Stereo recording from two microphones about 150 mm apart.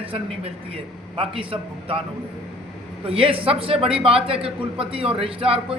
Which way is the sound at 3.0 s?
35° right (ahead or behind).